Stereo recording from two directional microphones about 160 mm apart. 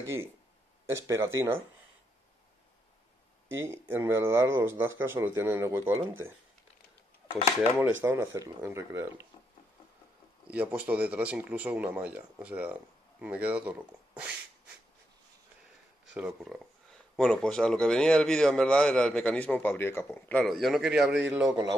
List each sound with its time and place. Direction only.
0.8 s speech: 20° right (ahead or behind)
3.9 s speech: 15° right (ahead or behind)
8.0 s speech: 15° right (ahead or behind)
10.5 s speech: 10° right (ahead or behind)
16.1 s a man's voice: 10° right (ahead or behind)